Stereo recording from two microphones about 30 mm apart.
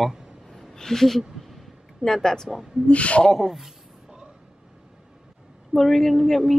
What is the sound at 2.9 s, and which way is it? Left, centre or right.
Speech, left.